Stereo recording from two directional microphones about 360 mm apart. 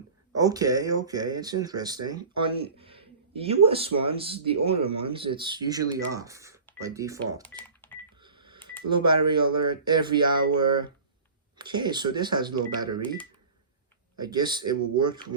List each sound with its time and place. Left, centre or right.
0.3 s speech: centre
7.4 s cash register: centre
8.2 s telephone dialing: centre
8.9 s speech: centre
14.2 s speech: centre